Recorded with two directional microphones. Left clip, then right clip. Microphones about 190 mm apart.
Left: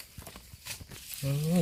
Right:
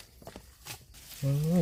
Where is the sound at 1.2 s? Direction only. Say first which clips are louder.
Right 1 dB; centre (ahead or behind).